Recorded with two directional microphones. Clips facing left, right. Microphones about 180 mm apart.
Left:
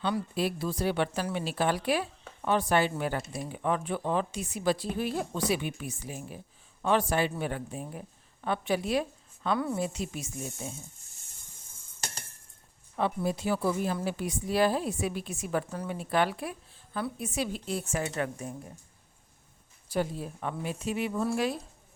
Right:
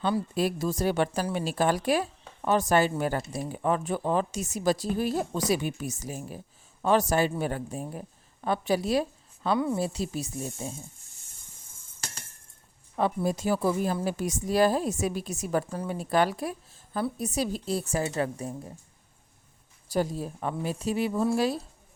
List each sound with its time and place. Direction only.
0.0 s a woman's voice: 40° right (ahead or behind)
13.0 s a woman's voice: 40° right (ahead or behind)
19.9 s a woman's voice: 40° right (ahead or behind)